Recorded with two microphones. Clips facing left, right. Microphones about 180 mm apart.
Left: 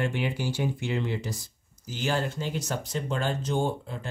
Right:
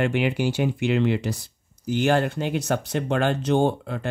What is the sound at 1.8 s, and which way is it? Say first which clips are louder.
Speech: right 8 dB; 60° right (ahead or behind).